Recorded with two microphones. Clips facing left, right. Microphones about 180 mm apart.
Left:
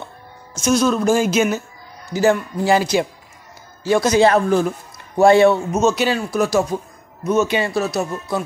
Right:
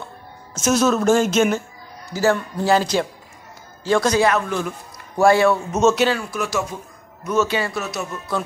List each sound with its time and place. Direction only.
0.6 s speech: 5° right (ahead or behind)
2.1 s speech: 15° left (ahead or behind)
4.2 s speech: 30° left (ahead or behind)
5.1 s a man's voice: 20° left (ahead or behind)
5.7 s speech: centre (ahead or behind)
6.3 s speech: 35° left (ahead or behind)
7.3 s a man's voice: 20° left (ahead or behind)
7.7 s speech: 35° left (ahead or behind)